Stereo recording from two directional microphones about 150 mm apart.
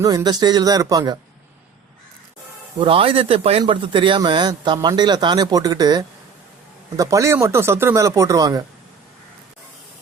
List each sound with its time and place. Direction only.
0.0 s speech: 25° right (ahead or behind)
2.7 s speech: 35° right (ahead or behind)